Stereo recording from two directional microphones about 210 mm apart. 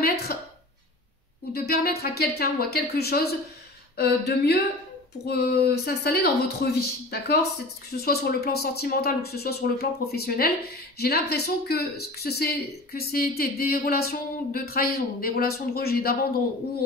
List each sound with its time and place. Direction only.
0.0 s speech: 50° left (ahead or behind)
1.5 s speech: 50° left (ahead or behind)